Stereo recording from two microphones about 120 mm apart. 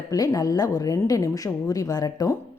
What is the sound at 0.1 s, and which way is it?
A woman's voice, 30° left (ahead or behind).